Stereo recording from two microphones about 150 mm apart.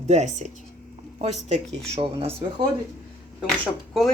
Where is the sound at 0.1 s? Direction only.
50° right (ahead or behind).